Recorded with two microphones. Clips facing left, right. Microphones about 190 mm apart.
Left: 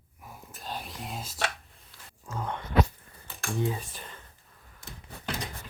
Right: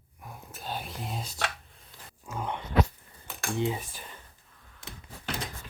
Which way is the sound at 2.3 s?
15° right (ahead or behind).